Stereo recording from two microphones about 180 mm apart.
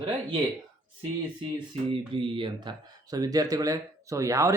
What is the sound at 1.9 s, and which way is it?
Speech, 30° right (ahead or behind).